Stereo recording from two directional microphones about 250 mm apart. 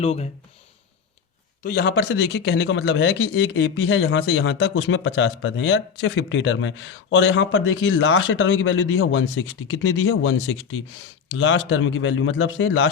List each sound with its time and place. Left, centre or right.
0.0 s speech: left
1.6 s speech: left